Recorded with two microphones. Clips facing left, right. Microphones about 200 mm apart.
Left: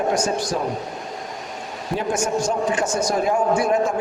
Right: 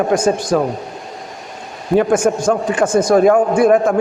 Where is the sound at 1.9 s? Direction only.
55° right (ahead or behind).